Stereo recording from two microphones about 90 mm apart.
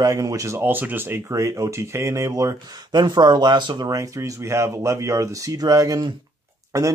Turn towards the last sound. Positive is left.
turn(degrees=-40)  # may be behind; listen again after turning